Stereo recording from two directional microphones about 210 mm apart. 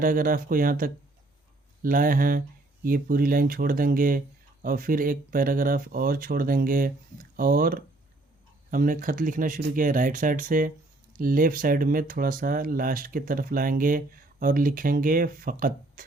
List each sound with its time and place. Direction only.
0.0 s speech: 40° right (ahead or behind)